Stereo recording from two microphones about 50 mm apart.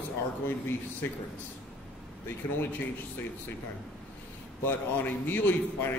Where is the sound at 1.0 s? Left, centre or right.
Left.